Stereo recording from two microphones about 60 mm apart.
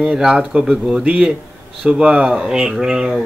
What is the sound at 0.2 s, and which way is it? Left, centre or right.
Speech, centre.